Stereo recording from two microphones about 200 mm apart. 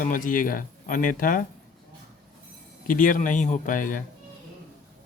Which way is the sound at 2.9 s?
40° left (ahead or behind).